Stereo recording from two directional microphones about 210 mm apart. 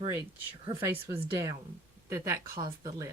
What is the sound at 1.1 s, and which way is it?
Speech, 10° right (ahead or behind).